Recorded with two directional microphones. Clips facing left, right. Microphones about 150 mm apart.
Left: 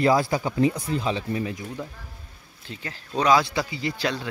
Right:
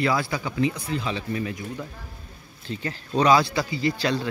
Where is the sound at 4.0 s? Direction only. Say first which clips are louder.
Right 2 dB; 10° left (ahead or behind).